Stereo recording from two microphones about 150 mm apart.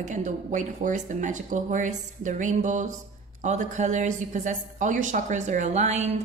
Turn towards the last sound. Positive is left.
turn(degrees=-50)  # may be behind; listen again after turning